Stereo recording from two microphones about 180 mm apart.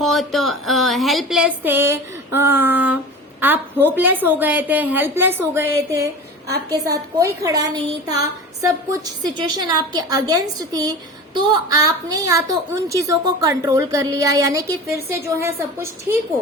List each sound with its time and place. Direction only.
0.0 s a woman's voice: centre (ahead or behind); by 8.3 s 20° right (ahead or behind)
9.4 s a woman's voice: 20° right (ahead or behind)